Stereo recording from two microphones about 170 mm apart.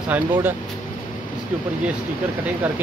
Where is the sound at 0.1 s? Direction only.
10° right (ahead or behind).